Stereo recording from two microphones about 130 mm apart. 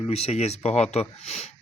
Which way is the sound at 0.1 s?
50° left (ahead or behind).